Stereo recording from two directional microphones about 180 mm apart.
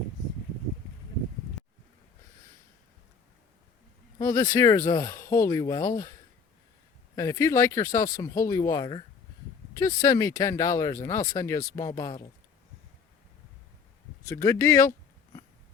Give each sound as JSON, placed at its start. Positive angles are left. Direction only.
{"t": 1.6, "sound": "a sound", "side_deg": 0}
{"t": 4.2, "sound": "speech", "side_deg": 20}
{"t": 7.2, "sound": "speech", "side_deg": 15}
{"t": 14.3, "sound": "speech", "side_deg": 20}